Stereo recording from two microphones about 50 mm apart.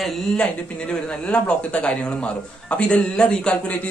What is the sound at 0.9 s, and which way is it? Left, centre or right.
Speech, left.